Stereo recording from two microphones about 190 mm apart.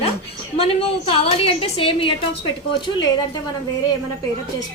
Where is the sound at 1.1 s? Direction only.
30° left (ahead or behind).